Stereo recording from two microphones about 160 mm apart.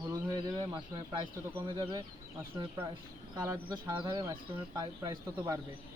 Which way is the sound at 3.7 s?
25° right (ahead or behind).